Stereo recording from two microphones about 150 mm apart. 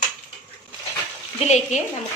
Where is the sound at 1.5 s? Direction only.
50° left (ahead or behind).